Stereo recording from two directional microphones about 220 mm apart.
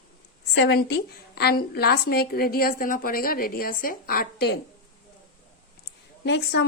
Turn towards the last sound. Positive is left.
turn(degrees=50)  # may be behind; listen again after turning